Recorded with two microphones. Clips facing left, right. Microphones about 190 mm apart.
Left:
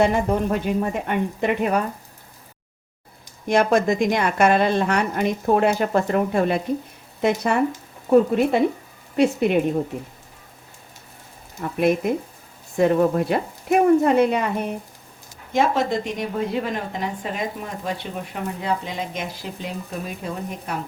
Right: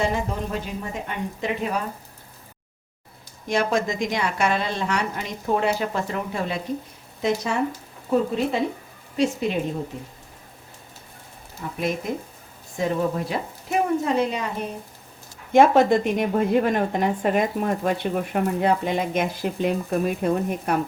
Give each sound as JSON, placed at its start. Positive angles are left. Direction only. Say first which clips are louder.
{"t": 0.0, "sound": "a woman's voice", "louder": "left 6 dB", "side_deg": 60}
{"t": 3.5, "sound": "a woman's voice", "louder": "left 5 dB", "side_deg": 55}
{"t": 12.7, "sound": "a woman's voice", "louder": "left 6 dB", "side_deg": 60}
{"t": 15.5, "sound": "a woman's voice", "louder": "right 5 dB", "side_deg": -55}